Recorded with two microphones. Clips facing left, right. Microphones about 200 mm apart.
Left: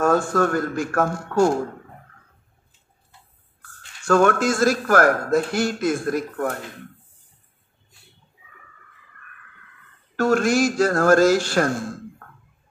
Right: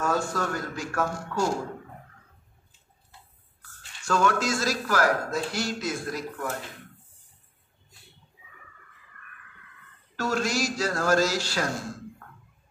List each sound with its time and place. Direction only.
0.0 s speech: 50° left (ahead or behind)
4.0 s speech: 55° left (ahead or behind)
10.1 s speech: 55° left (ahead or behind)